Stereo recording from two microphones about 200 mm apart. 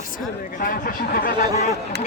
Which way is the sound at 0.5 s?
45° left (ahead or behind).